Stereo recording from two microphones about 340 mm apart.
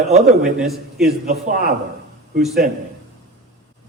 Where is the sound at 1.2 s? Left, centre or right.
Right.